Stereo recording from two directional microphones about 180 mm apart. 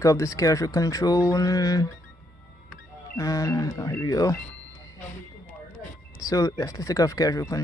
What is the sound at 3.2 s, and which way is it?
Speech, 20° left (ahead or behind).